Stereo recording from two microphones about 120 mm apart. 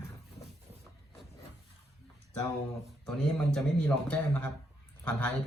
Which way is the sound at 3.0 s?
5° left (ahead or behind).